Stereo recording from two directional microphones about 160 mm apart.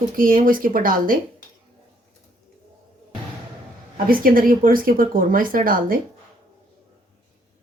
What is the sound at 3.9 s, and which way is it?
Speech, 65° right (ahead or behind).